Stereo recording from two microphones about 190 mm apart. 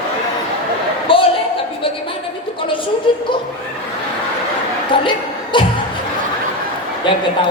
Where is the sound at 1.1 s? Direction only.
25° left (ahead or behind).